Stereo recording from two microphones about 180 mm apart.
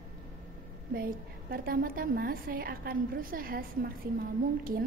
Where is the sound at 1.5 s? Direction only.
55° right (ahead or behind).